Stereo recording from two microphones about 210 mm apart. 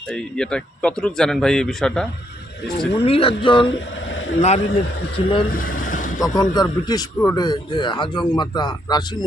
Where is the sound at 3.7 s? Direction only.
60° left (ahead or behind).